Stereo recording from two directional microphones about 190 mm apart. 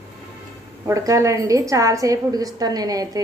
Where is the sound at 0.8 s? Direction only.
15° right (ahead or behind).